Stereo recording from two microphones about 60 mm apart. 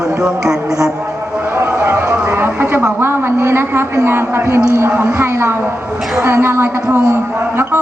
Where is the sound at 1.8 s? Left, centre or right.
Right.